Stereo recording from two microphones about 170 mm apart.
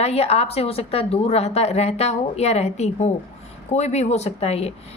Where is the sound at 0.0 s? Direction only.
40° left (ahead or behind).